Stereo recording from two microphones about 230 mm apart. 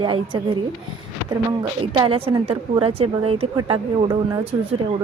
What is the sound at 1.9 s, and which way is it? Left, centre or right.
A woman's voice, centre.